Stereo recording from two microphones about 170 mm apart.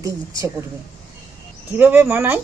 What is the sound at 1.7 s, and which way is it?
Speech, 10° right (ahead or behind).